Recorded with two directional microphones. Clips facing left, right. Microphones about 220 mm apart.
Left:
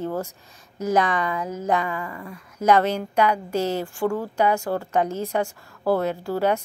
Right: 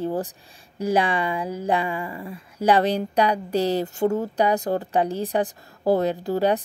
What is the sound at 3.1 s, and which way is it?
Speech, 35° right (ahead or behind).